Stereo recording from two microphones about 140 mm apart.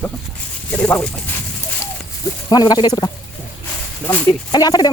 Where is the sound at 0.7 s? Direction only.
10° left (ahead or behind).